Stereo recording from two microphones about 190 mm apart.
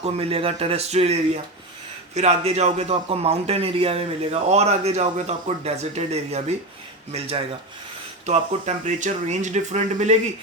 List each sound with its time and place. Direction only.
0.0 s a man's voice: 30° right (ahead or behind)